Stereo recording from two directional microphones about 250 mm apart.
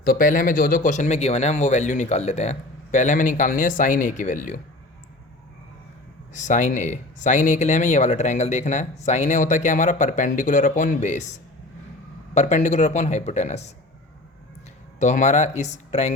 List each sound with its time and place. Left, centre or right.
0.0 s speech: left
6.3 s speech: left
14.9 s speech: left